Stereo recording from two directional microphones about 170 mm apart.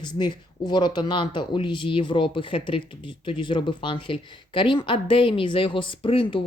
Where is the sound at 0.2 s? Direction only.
25° left (ahead or behind).